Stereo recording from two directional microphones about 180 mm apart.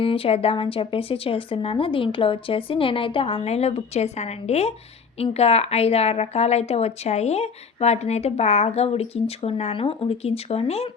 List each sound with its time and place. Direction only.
0.0 s a woman's voice: 30° left (ahead or behind)